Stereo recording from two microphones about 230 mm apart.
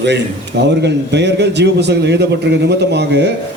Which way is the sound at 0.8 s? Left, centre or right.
Right.